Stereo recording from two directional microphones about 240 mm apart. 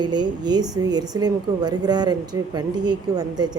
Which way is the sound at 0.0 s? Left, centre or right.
Centre.